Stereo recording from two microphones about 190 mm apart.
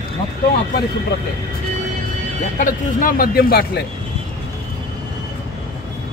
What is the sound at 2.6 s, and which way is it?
Speech, 45° left (ahead or behind).